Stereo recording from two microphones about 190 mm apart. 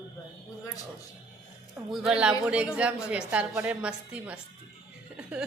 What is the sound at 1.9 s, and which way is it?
A woman's voice, 5° right (ahead or behind).